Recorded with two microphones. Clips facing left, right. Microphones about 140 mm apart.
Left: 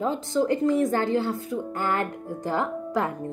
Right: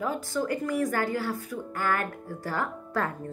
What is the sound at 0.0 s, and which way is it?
A woman's voice, 25° left (ahead or behind).